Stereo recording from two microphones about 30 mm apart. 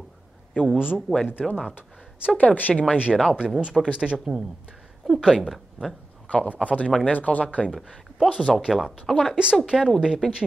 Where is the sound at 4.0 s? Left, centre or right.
Right.